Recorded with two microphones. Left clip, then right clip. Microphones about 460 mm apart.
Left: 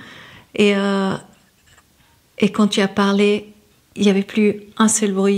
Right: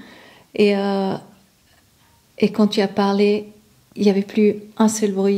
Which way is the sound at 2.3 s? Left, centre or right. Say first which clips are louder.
Even; centre.